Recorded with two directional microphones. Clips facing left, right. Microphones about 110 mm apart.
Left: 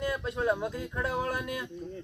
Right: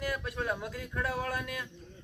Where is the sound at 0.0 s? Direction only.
25° left (ahead or behind).